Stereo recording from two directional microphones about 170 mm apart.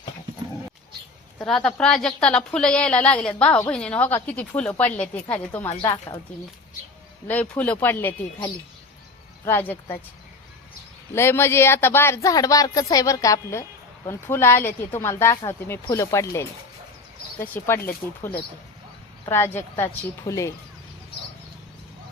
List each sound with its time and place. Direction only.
1.4 s a woman's voice: 5° left (ahead or behind)
5.8 s speech: 25° left (ahead or behind)
7.3 s speech: 10° left (ahead or behind)
11.1 s speech: 15° left (ahead or behind)
17.4 s speech: 10° left (ahead or behind)